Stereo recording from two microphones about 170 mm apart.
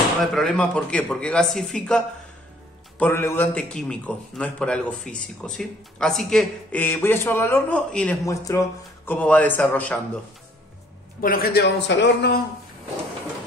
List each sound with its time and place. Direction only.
0.2 s a man's voice: centre (ahead or behind)
8.3 s a man's voice: 20° left (ahead or behind)
11.1 s speech: 60° left (ahead or behind); by 12.4 s 85° left